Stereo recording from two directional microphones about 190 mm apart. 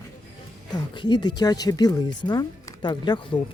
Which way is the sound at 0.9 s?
25° left (ahead or behind).